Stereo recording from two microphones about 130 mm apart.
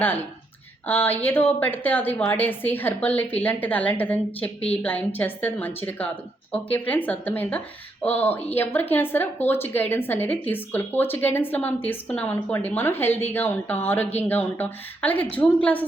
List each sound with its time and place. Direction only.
0.0 s a woman's voice: 15° left (ahead or behind)